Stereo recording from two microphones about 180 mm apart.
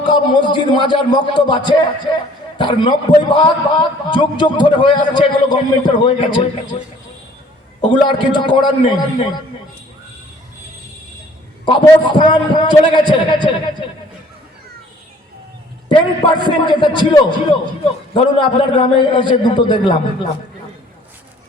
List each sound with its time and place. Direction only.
0.0 s a man's voice: 25° left (ahead or behind)
7.8 s a man's voice: 25° left (ahead or behind)
11.6 s a man's voice: 25° left (ahead or behind)
15.9 s a man's voice: 25° left (ahead or behind)